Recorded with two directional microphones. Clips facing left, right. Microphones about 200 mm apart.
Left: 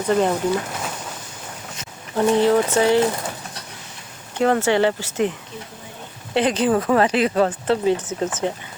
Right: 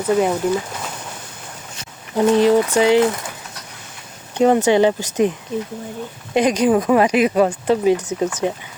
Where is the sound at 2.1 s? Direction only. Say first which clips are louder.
Right 3 dB; 15° right (ahead or behind).